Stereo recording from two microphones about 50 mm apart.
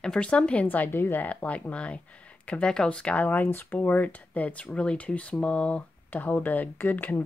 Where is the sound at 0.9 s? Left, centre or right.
Left.